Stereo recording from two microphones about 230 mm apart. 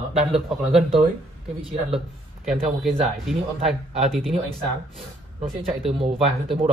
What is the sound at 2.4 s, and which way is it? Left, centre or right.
Speech, centre.